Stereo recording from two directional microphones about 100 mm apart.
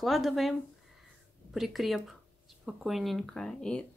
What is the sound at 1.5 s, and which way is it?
Speech, centre (ahead or behind).